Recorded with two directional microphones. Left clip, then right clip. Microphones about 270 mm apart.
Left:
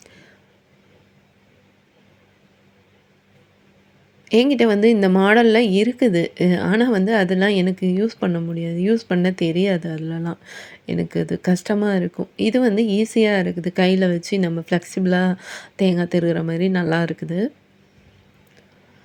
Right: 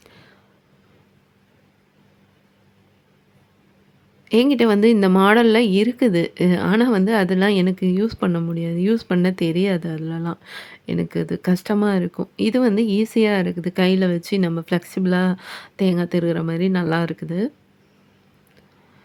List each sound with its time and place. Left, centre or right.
0.0 s whispering: centre
4.3 s speech: centre